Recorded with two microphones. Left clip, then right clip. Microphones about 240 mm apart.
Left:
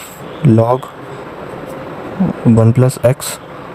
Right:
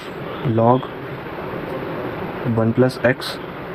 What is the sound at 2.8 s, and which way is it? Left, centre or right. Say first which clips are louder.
Speech: left 3 dB; left.